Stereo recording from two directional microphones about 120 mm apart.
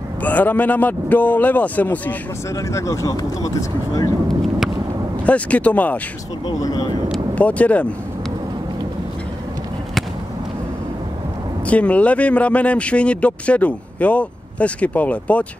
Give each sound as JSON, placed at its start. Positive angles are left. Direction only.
{"t": 0.2, "sound": "speech", "side_deg": 15}
{"t": 2.5, "sound": "speech", "side_deg": 25}
{"t": 5.2, "sound": "speech", "side_deg": 10}
{"t": 6.4, "sound": "speech", "side_deg": 30}
{"t": 7.1, "sound": "speech", "side_deg": 10}
{"t": 11.6, "sound": "speech", "side_deg": 10}